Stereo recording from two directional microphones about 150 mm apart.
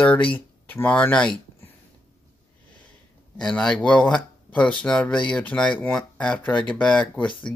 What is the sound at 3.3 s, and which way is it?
Speech, 5° left (ahead or behind).